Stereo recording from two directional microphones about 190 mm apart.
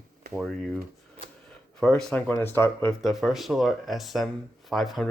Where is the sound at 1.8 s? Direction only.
5° left (ahead or behind).